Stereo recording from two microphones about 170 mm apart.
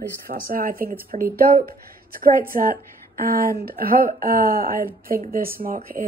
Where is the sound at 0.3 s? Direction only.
55° right (ahead or behind).